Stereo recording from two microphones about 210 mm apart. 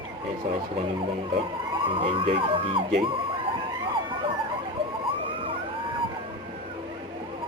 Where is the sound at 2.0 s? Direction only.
25° right (ahead or behind).